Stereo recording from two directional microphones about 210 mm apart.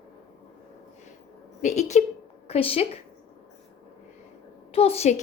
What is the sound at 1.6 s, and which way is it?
A woman's voice, 35° left (ahead or behind).